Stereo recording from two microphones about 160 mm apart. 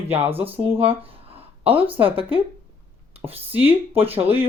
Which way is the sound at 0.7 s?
35° right (ahead or behind).